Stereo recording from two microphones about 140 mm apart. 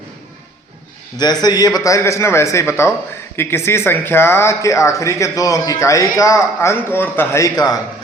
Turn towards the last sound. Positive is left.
turn(degrees=25)  # may be behind; listen again after turning